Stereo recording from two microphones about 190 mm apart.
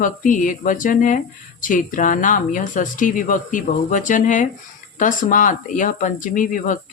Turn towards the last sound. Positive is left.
turn(degrees=45)  # may be behind; listen again after turning